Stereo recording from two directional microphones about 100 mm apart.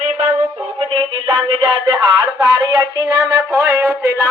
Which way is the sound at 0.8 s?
65° right (ahead or behind).